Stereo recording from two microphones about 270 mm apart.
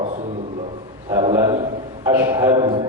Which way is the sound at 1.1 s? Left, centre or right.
Centre.